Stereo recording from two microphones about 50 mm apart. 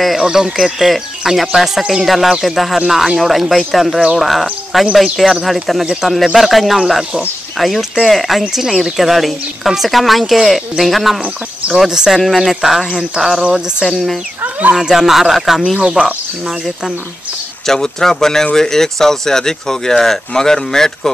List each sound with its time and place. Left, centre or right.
0.0 s speech: centre
13.8 s speech: centre
14.4 s speech: right
14.8 s speech: centre
16.0 s speech: centre
16.4 s speech: centre
17.6 s speech: centre